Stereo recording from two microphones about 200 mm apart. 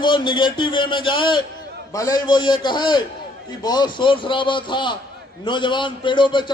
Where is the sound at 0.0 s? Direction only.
25° left (ahead or behind).